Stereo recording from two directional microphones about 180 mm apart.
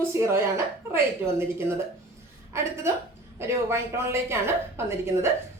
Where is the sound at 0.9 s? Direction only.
15° right (ahead or behind).